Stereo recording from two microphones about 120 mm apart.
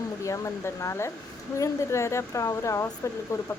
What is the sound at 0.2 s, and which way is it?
Speech, 25° left (ahead or behind).